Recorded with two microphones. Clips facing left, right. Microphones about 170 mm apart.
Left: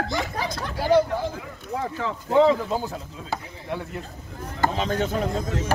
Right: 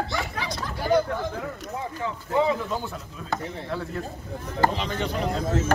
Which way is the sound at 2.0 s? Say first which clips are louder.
Left 6 dB; 90° left.